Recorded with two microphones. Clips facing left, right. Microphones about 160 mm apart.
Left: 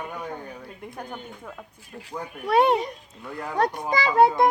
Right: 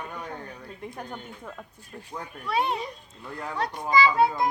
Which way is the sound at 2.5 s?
60° left (ahead or behind).